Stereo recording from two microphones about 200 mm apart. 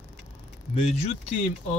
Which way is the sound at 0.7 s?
35° left (ahead or behind).